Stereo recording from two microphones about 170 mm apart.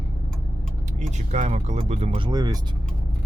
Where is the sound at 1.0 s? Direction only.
45° right (ahead or behind).